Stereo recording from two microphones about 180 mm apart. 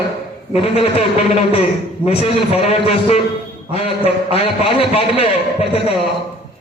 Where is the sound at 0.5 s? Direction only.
35° left (ahead or behind).